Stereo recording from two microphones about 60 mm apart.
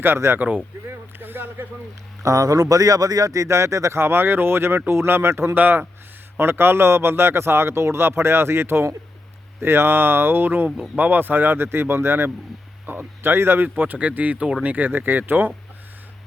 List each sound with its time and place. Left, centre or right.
0.0 s speech: right
0.3 s speech: right
2.2 s speech: right
3.9 s a man's voice: right
5.5 s a man's voice: right